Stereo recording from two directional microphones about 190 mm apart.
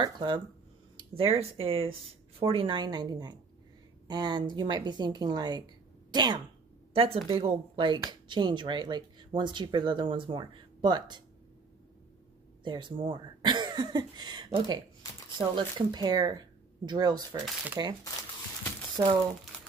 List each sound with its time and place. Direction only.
0.0 s speech: 25° right (ahead or behind)
0.9 s a sound: 30° right (ahead or behind)
1.6 s speech: 30° right (ahead or behind)
12.6 s speech: 25° right (ahead or behind)